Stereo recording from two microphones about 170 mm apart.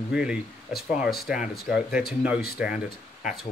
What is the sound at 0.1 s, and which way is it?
Speech, 5° right (ahead or behind).